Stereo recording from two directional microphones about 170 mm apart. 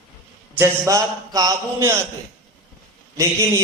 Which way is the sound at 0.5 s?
15° right (ahead or behind).